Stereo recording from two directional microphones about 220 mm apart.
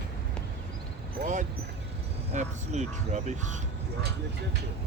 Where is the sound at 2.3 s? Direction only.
30° right (ahead or behind).